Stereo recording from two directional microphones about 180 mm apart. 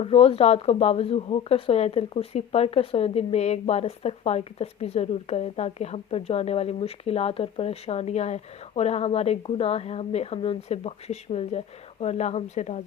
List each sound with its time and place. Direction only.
0.0 s speech: 30° left (ahead or behind)